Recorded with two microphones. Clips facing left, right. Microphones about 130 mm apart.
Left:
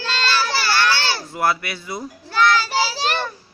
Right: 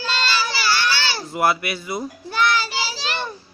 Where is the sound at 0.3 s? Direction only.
60° left (ahead or behind).